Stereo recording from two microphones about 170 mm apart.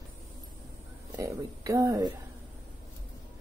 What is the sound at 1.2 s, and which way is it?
Speech, 20° right (ahead or behind).